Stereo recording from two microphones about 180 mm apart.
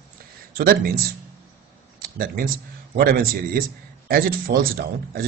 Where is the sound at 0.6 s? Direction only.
55° right (ahead or behind).